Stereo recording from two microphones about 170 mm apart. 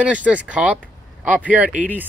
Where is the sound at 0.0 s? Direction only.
10° right (ahead or behind).